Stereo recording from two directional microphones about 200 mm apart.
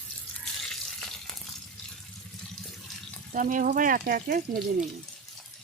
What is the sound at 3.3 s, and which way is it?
Speech, 40° right (ahead or behind).